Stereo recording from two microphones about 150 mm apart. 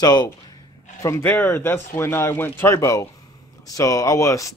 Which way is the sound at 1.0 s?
15° left (ahead or behind).